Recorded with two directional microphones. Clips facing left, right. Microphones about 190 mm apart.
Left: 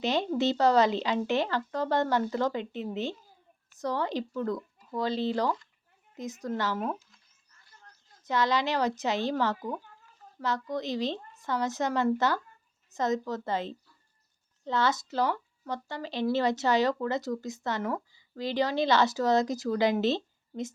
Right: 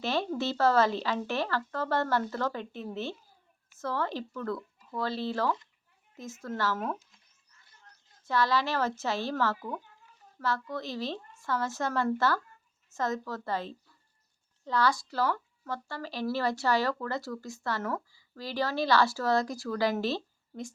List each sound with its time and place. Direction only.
0.0 s speech: 20° left (ahead or behind)
8.2 s speech: 20° left (ahead or behind)